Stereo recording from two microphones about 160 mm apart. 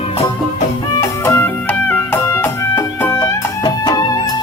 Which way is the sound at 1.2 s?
15° left (ahead or behind).